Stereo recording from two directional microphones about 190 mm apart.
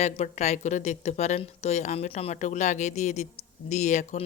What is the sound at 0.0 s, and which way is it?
Speech, 35° left (ahead or behind).